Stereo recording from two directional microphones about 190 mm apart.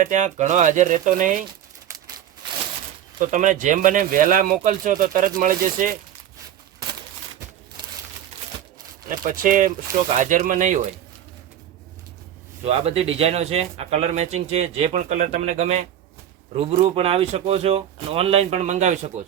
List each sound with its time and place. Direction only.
0.0 s speech: 40° right (ahead or behind)
3.2 s speech: 40° right (ahead or behind)
9.0 s speech: 45° right (ahead or behind)
12.6 s speech: 30° right (ahead or behind)